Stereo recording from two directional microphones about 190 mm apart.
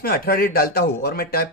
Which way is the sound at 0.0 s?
55° left (ahead or behind).